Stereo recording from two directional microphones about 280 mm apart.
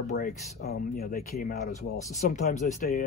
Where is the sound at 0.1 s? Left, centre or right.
Left.